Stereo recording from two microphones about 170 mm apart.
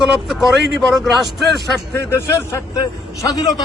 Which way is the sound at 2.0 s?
15° left (ahead or behind).